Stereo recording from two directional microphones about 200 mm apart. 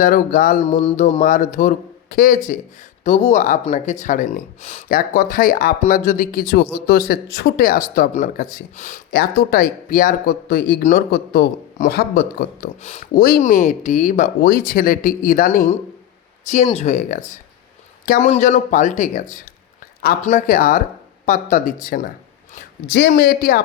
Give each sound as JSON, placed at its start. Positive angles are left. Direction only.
{"t": 0.0, "sound": "speech", "side_deg": 40}
{"t": 12.8, "sound": "speech", "side_deg": 30}
{"t": 13.2, "sound": "a man's voice", "side_deg": 45}